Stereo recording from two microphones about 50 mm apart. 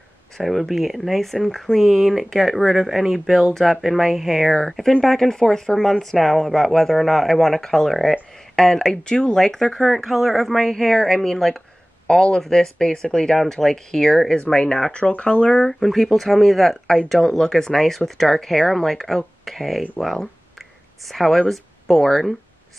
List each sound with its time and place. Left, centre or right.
0.4 s speech: centre
14.3 s speech: centre
15.8 s speech: centre